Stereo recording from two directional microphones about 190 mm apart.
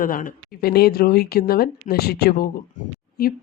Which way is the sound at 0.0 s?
45° left (ahead or behind).